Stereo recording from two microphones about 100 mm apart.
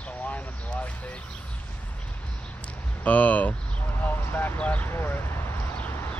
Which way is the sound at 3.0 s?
15° left (ahead or behind).